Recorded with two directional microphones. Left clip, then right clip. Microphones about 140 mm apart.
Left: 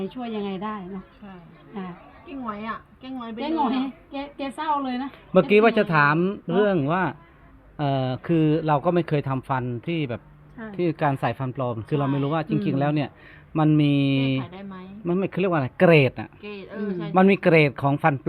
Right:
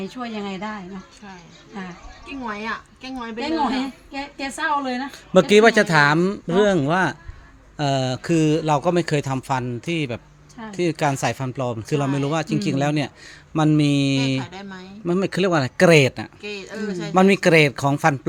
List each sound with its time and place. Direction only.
0.2 s a woman's voice: 25° right (ahead or behind)
2.5 s a woman's voice: 20° left (ahead or behind)
3.3 s a woman's voice: 20° right (ahead or behind)
5.3 s speech: 55° right (ahead or behind); by 14.4 s 35° right (ahead or behind)
14.5 s speech: 5° left (ahead or behind)
15.0 s speech: 50° right (ahead or behind)
15.8 s speech: 40° right (ahead or behind)
16.4 s speech: 5° left (ahead or behind)
17.1 s speech: 35° right (ahead or behind)